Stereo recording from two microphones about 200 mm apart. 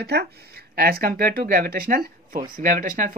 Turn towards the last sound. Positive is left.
turn(degrees=-45)  # may be behind; listen again after turning